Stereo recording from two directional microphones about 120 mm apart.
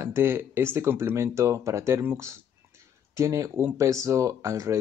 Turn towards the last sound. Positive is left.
turn(degrees=-25)  # may be behind; listen again after turning